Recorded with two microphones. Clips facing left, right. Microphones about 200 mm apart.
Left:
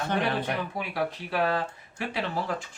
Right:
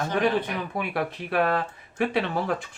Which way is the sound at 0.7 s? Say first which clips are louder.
Right 2 dB; 60° right (ahead or behind).